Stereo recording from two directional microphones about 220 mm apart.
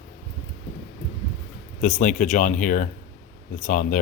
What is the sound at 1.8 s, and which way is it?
Speech, 35° left (ahead or behind).